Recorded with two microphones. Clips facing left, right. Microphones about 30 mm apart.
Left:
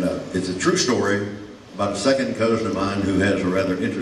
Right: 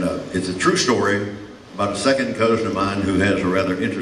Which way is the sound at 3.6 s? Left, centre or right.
Right.